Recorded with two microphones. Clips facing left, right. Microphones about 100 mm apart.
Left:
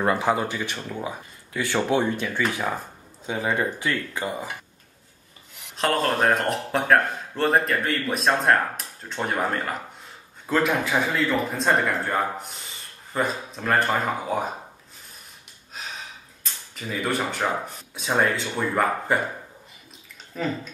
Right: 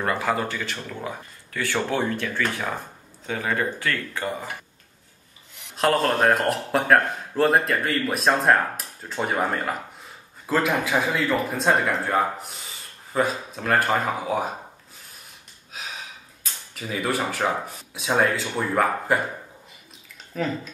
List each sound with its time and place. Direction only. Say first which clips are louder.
0.0 s speech: left 2 dB; 20° left (ahead or behind)
5.8 s speech: right 2 dB; centre (ahead or behind)
16.7 s speech: right 1 dB; centre (ahead or behind)
20.4 s speech: right 1 dB; centre (ahead or behind)